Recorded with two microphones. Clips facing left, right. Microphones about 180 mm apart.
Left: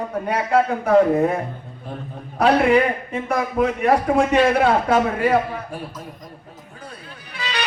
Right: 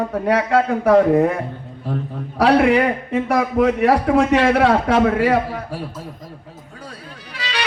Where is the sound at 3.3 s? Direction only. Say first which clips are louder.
Right 3 dB; 90° right.